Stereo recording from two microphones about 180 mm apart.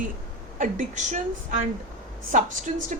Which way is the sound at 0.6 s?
45° right (ahead or behind).